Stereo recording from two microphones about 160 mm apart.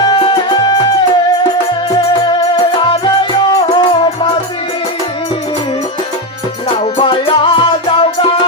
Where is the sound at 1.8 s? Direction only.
25° left (ahead or behind).